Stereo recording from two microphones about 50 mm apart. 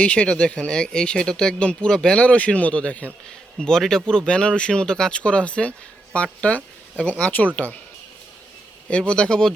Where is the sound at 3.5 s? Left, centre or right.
Centre.